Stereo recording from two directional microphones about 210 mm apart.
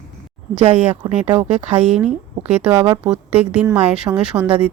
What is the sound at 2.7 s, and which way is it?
Speech, 25° right (ahead or behind).